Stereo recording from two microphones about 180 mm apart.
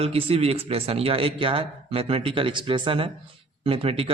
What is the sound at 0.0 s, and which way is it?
Speech, 30° right (ahead or behind).